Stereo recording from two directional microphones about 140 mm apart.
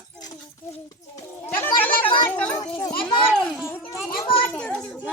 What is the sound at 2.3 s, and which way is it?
Dog, 10° left (ahead or behind).